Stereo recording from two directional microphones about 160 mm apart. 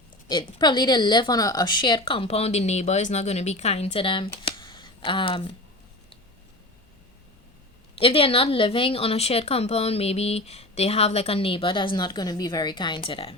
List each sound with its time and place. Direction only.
0.3 s speech: 25° left (ahead or behind)
4.4 s shuffling cards: 30° left (ahead or behind)
7.9 s speech: 35° left (ahead or behind)